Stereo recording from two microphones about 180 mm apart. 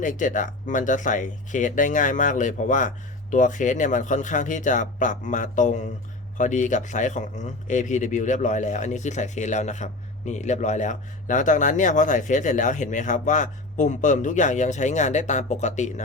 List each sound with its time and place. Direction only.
0.0 s a man's voice: 45° left (ahead or behind)